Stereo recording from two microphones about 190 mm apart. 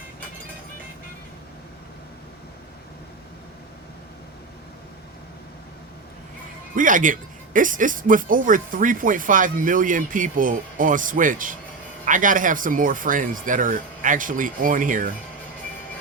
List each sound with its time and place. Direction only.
6.7 s speech: 45° right (ahead or behind)